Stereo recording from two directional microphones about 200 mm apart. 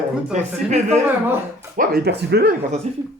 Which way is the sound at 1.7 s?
50° right (ahead or behind).